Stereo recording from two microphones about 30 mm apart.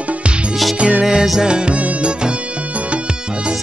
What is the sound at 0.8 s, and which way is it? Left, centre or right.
Music, right.